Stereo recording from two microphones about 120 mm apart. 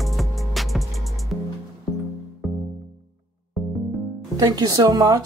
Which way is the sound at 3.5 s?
Centre (ahead or behind).